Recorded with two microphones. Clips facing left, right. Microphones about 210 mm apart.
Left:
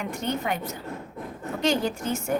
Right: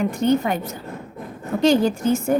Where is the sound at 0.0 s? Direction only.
35° right (ahead or behind).